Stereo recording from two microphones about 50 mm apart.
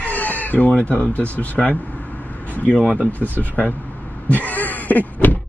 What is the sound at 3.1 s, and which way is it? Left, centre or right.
Speech, left.